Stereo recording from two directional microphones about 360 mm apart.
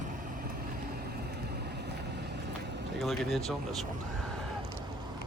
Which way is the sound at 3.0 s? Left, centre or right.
Centre.